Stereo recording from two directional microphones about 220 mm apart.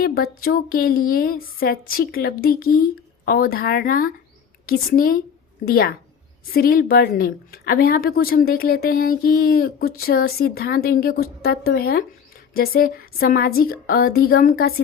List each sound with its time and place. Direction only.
0.0 s a woman's voice: 45° left (ahead or behind)